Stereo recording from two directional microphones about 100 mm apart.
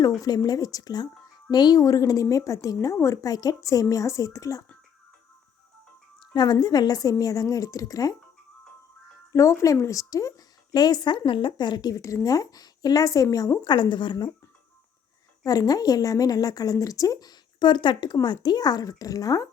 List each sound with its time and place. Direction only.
0.2 s a woman's voice: 40° left (ahead or behind)
6.3 s a woman's voice: 45° left (ahead or behind)
9.3 s a woman's voice: 30° left (ahead or behind)
13.7 s speech: 50° left (ahead or behind)
15.4 s a woman's voice: 40° left (ahead or behind)